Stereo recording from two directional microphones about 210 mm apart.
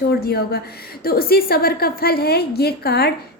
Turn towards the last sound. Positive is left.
turn(degrees=50)  # may be behind; listen again after turning